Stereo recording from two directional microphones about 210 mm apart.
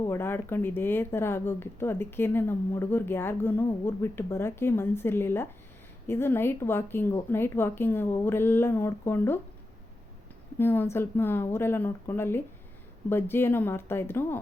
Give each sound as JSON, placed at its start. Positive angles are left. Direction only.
{"t": 0.0, "sound": "speech", "side_deg": 10}
{"t": 10.6, "sound": "speech", "side_deg": 10}